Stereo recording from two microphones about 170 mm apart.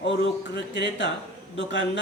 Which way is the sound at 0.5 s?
90° left.